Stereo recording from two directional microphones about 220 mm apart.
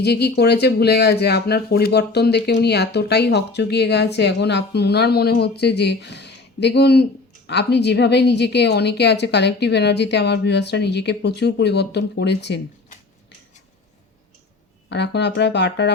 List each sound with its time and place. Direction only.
0.0 s speech: 45° left (ahead or behind)
14.8 s speech: 50° left (ahead or behind)